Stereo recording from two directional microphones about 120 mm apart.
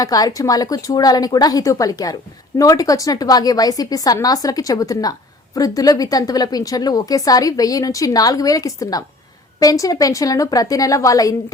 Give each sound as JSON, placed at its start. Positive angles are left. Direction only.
{"t": 0.0, "sound": "a woman's voice", "side_deg": 30}